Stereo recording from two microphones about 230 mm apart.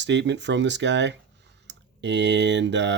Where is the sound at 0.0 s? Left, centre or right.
Right.